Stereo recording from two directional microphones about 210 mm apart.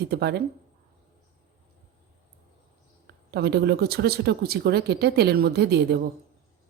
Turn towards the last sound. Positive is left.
turn(degrees=-50)  # may be behind; listen again after turning